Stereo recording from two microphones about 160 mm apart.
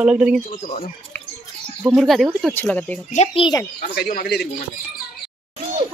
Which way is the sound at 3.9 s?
70° left (ahead or behind).